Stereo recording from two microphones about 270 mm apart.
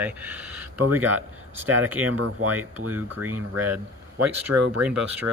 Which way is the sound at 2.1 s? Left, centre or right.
Right.